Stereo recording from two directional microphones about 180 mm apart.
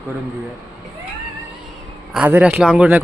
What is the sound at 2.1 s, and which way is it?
Speech, 10° right (ahead or behind).